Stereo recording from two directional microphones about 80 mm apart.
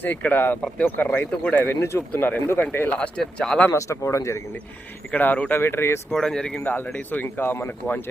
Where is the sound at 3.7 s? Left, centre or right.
Left.